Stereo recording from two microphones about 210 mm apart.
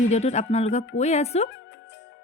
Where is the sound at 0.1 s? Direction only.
30° left (ahead or behind).